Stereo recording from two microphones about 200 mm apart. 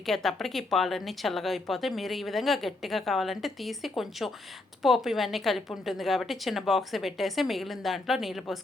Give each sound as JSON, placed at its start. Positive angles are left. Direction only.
{"t": 0.0, "sound": "speech", "side_deg": 0}